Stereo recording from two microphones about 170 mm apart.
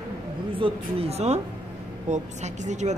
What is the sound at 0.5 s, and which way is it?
A woman's voice, 35° right (ahead or behind).